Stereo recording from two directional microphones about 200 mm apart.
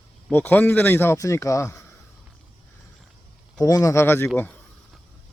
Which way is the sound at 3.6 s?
15° left (ahead or behind).